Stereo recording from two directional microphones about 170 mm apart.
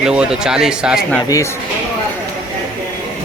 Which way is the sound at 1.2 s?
20° left (ahead or behind).